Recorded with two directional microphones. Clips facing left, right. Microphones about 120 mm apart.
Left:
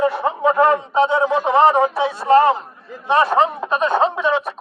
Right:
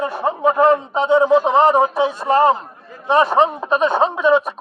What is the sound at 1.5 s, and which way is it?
Speech, 15° right (ahead or behind).